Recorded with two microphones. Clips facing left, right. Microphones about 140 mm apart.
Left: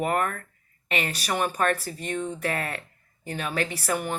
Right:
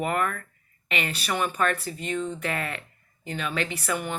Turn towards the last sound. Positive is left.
turn(degrees=45)  # may be behind; listen again after turning